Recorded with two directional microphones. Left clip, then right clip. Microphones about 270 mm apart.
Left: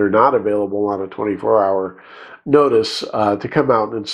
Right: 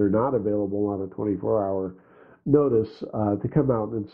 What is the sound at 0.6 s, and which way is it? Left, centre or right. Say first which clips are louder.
Speech: left 7 dB; left.